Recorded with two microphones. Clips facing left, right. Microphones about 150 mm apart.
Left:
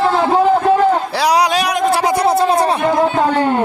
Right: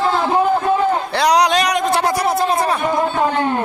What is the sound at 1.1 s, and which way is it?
Speech, 5° left (ahead or behind).